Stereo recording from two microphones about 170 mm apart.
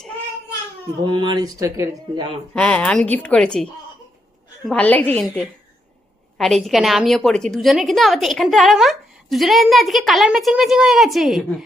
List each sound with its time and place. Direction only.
1.0 s speech: 25° right (ahead or behind)
2.6 s a woman's voice: 5° left (ahead or behind)